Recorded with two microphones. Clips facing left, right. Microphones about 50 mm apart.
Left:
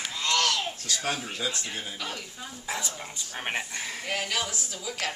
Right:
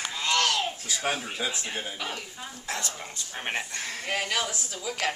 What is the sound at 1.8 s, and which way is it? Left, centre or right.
Speech, right.